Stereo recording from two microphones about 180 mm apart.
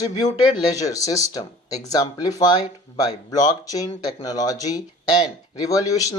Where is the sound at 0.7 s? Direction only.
20° left (ahead or behind).